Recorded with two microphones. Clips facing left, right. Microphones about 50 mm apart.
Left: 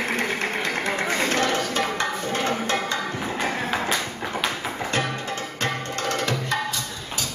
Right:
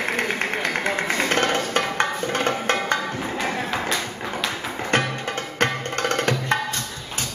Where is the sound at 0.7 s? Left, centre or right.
Right.